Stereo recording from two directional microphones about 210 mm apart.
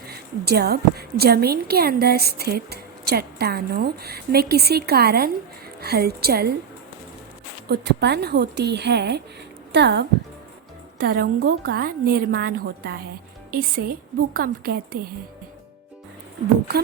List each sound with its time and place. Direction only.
0.4 s a woman's voice: 50° right (ahead or behind)
7.7 s a woman's voice: 50° right (ahead or behind)